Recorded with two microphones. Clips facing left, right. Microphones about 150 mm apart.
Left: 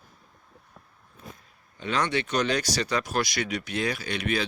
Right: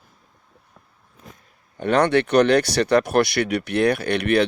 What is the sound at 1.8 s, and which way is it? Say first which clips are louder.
Speech: right 9 dB; 60° right (ahead or behind).